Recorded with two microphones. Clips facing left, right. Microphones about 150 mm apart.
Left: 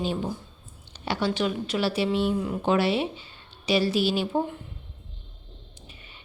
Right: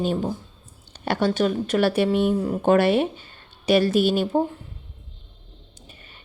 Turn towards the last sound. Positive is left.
turn(degrees=-45)  # may be behind; listen again after turning